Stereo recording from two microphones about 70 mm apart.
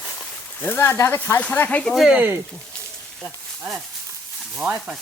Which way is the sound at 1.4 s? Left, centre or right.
Left.